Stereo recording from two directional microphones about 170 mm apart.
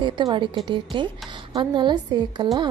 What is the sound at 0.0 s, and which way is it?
A woman's voice, 25° right (ahead or behind).